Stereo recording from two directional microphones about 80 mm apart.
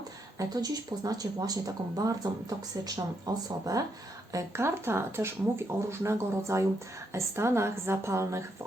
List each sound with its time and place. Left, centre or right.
0.3 s speech: right
4.3 s speech: right